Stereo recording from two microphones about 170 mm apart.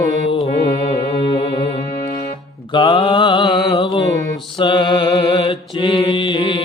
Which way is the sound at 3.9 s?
25° left (ahead or behind).